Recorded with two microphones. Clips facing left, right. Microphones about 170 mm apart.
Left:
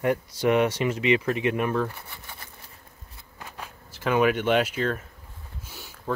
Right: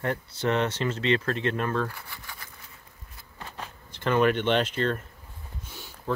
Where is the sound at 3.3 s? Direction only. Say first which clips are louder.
Right 1 dB; 10° left (ahead or behind).